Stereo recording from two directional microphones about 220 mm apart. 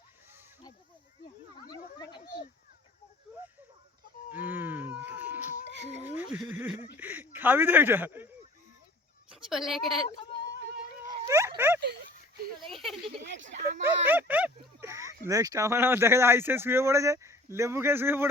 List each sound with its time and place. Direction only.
1.6 s a sound: 20° left (ahead or behind)
4.3 s a sound: 10° right (ahead or behind)
5.6 s a sound: 55° right (ahead or behind)
6.3 s speech: 10° right (ahead or behind)
9.3 s speech: centre (ahead or behind)
11.0 s dog: 15° right (ahead or behind)
12.7 s speech: centre (ahead or behind)
13.2 s speech: 55° right (ahead or behind)
13.8 s speech: 10° right (ahead or behind)